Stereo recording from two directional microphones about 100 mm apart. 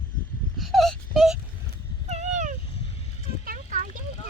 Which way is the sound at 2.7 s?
85° left.